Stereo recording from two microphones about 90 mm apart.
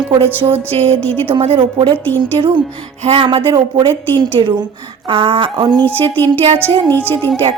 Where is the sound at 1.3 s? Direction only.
80° right; by 4.6 s 55° right (ahead or behind).